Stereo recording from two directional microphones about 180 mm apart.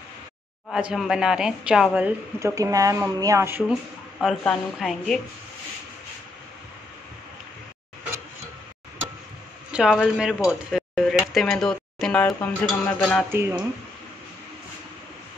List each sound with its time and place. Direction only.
0.7 s a woman's voice: 5° right (ahead or behind)
2.5 s speech: 20° right (ahead or behind)
4.2 s a woman's voice: centre (ahead or behind)
9.7 s speech: 5° right (ahead or behind)
10.7 s dishes: centre (ahead or behind)
11.3 s speech: centre (ahead or behind)
12.3 s a sound: 10° left (ahead or behind)
13.3 s speech: 15° right (ahead or behind)